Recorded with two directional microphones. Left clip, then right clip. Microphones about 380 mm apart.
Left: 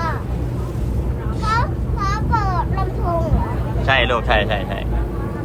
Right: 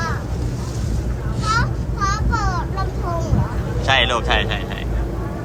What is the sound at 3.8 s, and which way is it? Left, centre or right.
Speech, centre.